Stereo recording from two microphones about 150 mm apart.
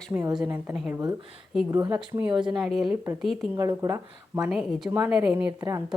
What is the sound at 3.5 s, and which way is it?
Speech, 25° right (ahead or behind).